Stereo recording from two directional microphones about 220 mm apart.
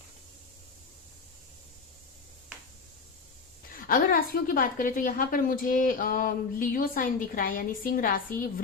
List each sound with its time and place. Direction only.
3.8 s a woman's voice: 40° left (ahead or behind)